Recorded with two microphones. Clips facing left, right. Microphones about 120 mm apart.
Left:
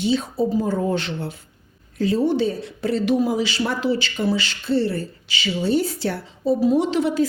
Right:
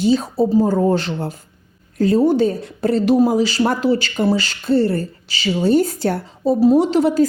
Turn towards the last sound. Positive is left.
turn(degrees=-40)  # may be behind; listen again after turning